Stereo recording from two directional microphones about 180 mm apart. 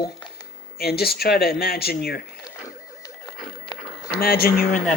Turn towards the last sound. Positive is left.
turn(degrees=50)  # may be behind; listen again after turning